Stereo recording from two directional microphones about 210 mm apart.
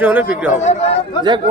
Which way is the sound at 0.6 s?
35° left (ahead or behind).